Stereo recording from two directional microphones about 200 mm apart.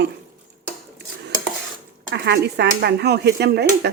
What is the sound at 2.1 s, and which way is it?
Speech, 55° right (ahead or behind).